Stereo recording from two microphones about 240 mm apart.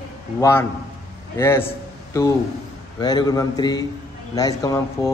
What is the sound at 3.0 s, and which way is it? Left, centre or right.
A man's voice, centre.